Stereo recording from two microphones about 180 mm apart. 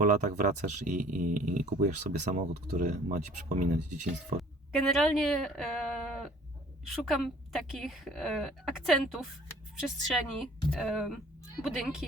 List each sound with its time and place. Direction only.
0.0 s speech: 45° right (ahead or behind)
4.9 s a woman's voice: centre (ahead or behind)